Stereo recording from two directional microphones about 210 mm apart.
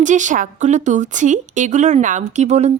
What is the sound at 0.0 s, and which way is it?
A woman's voice, 35° right (ahead or behind).